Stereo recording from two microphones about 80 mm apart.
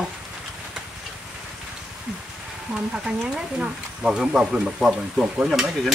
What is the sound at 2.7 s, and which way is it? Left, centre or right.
Speech, centre.